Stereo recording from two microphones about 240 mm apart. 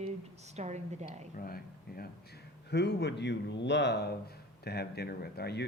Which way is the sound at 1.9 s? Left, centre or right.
Left.